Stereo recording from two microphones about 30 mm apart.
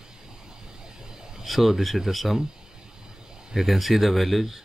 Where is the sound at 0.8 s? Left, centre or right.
Right.